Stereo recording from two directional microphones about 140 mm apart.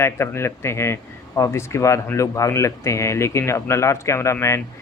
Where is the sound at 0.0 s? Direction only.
20° left (ahead or behind).